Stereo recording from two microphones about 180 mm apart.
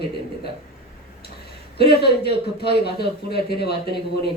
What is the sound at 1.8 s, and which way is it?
Speech, 65° left (ahead or behind).